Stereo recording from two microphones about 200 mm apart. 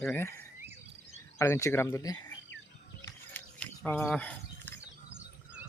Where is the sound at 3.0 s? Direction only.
10° left (ahead or behind).